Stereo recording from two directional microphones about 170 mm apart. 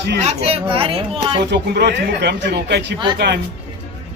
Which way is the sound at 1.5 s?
85° right.